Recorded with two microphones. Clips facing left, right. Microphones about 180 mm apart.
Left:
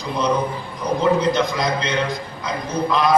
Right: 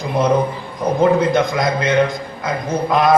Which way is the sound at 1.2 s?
50° right (ahead or behind).